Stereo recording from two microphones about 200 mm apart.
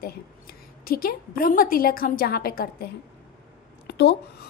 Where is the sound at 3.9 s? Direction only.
55° left (ahead or behind).